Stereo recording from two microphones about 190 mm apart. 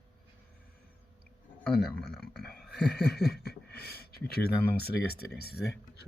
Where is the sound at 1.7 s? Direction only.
Centre (ahead or behind).